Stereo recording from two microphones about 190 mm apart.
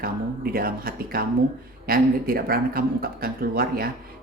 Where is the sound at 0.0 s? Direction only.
50° right (ahead or behind).